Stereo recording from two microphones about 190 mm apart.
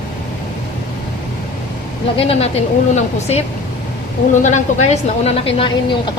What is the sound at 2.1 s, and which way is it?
A woman's voice, 30° left (ahead or behind).